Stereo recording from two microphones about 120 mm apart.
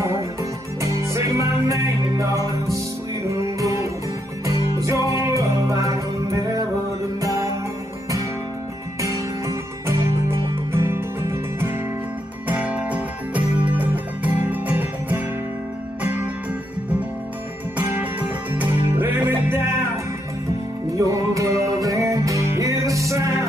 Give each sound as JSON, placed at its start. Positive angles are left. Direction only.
{"t": 0.0, "sound": "music", "side_deg": -25}
{"t": 9.0, "sound": "music", "side_deg": -25}
{"t": 12.4, "sound": "music", "side_deg": -10}
{"t": 17.7, "sound": "music", "side_deg": -15}
{"t": 20.9, "sound": "music", "side_deg": -25}